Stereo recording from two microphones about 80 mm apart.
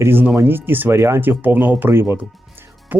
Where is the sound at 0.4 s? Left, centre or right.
Right.